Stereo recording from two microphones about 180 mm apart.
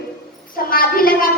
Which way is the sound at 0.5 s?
55° left (ahead or behind).